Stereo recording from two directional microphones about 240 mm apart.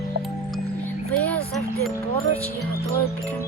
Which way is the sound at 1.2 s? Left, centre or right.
Centre.